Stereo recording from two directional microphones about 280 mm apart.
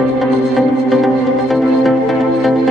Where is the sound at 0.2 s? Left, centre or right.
Centre.